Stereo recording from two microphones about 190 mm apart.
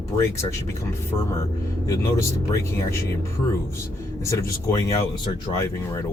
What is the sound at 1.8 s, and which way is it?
Speech, 15° left (ahead or behind).